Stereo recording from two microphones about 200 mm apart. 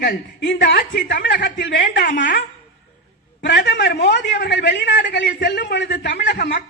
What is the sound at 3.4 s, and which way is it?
A woman's voice, 55° left (ahead or behind).